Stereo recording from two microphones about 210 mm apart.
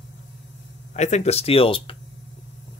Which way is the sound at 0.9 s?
35° left (ahead or behind).